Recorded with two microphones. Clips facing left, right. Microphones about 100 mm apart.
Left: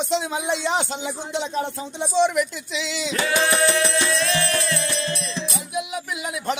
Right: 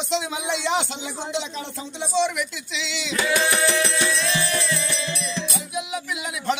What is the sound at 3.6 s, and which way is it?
Music, 35° left (ahead or behind).